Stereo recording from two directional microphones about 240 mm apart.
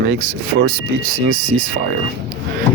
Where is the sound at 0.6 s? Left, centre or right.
Right.